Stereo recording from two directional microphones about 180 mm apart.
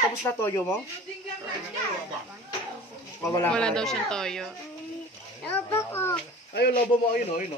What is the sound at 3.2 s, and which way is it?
Speech, 15° left (ahead or behind).